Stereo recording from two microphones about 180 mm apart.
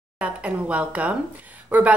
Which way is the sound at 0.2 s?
5° right (ahead or behind).